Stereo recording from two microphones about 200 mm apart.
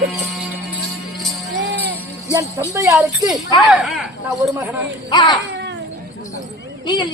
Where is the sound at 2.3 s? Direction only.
15° right (ahead or behind).